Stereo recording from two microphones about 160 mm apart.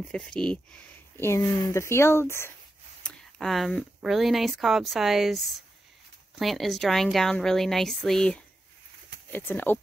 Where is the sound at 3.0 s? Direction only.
Centre (ahead or behind).